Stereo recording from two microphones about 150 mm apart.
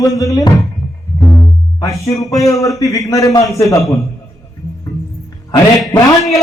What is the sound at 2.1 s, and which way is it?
Speech, centre (ahead or behind).